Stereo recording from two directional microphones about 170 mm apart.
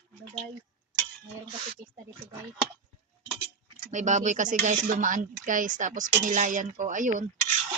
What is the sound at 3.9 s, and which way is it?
Speech, 45° right (ahead or behind).